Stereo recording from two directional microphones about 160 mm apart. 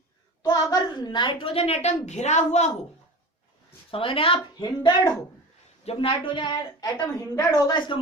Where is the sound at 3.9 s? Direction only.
35° left (ahead or behind).